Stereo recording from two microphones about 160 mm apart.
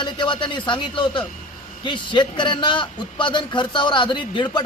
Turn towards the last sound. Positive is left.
turn(degrees=30)  # may be behind; listen again after turning